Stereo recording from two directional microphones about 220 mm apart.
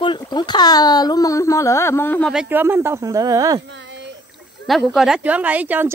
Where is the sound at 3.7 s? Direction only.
55° right (ahead or behind).